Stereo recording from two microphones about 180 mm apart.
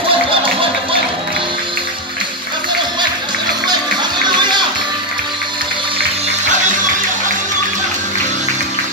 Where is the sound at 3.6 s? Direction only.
25° right (ahead or behind).